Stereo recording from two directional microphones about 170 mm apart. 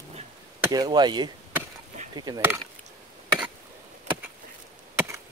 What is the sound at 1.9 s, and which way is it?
Chop, 45° right (ahead or behind).